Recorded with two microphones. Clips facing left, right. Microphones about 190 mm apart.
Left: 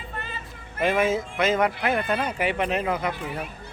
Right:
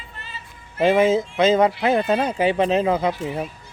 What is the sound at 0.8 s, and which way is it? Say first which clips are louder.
Speech: right 6 dB; 25° right (ahead or behind).